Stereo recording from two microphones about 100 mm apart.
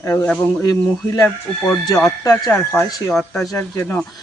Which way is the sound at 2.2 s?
35° left (ahead or behind).